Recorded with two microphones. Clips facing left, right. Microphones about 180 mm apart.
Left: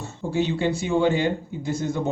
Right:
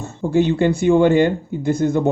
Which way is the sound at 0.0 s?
50° right (ahead or behind).